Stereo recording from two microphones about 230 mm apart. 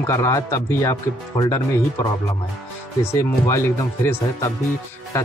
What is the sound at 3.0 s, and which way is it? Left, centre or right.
Speech, centre.